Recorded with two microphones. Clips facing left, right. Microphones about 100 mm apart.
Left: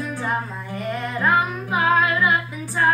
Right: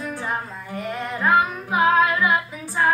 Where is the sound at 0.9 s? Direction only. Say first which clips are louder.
Right 1 dB; centre (ahead or behind).